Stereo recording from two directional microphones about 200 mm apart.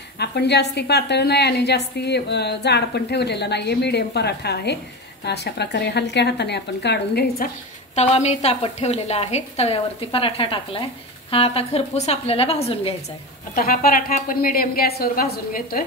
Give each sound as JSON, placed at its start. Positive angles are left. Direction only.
{"t": 0.2, "sound": "a woman's voice", "side_deg": 55}
{"t": 7.9, "sound": "a woman's voice", "side_deg": 30}
{"t": 13.6, "sound": "a woman's voice", "side_deg": 45}